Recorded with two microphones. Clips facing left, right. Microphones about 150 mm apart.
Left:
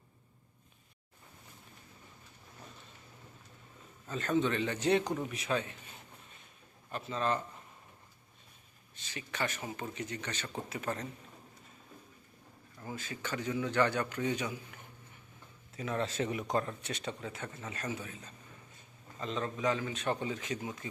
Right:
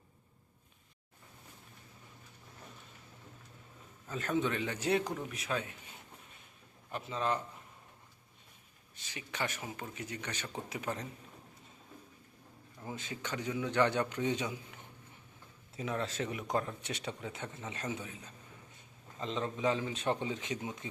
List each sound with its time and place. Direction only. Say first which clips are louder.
4.1 s a man's voice: left 2 dB; 10° right (ahead or behind)
6.9 s a man's voice: left 1 dB; 10° right (ahead or behind)
9.0 s a man's voice: left 1 dB; 15° right (ahead or behind)
9.6 s a man's voice: left 3 dB; 5° right (ahead or behind)
12.8 s a man's voice: left 1 dB; 20° right (ahead or behind)
15.9 s a man's voice: left 3 dB; centre (ahead or behind); by 20.8 s 20° right (ahead or behind)